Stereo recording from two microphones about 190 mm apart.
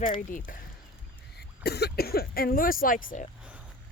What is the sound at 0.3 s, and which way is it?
Speech, 45° left (ahead or behind).